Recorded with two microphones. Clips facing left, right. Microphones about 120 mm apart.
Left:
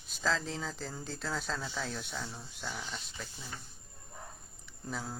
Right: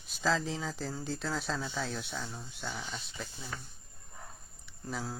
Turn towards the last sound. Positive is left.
turn(degrees=0)  # may be behind; listen again after turning